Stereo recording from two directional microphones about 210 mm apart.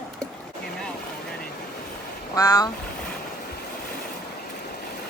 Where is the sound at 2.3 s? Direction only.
15° left (ahead or behind).